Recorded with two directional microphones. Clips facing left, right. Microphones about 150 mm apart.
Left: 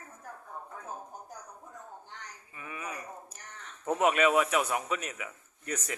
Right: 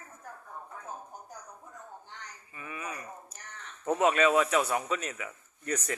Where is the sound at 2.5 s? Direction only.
20° left (ahead or behind).